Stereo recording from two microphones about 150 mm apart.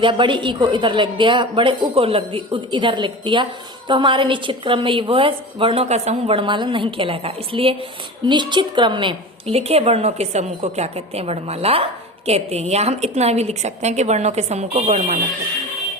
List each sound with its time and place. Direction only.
0.0 s a woman's voice: 35° right (ahead or behind); by 15.2 s 50° right (ahead or behind)